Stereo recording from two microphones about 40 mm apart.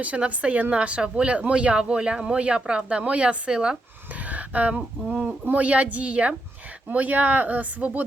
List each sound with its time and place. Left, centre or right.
0.0 s speech: right
4.1 s a sound: right
5.5 s speech: right